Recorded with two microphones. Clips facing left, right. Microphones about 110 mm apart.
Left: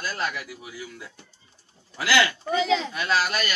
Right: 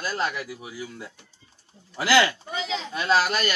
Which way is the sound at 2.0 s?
30° right (ahead or behind).